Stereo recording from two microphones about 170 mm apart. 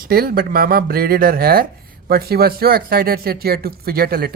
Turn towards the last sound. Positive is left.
turn(degrees=-60)  # may be behind; listen again after turning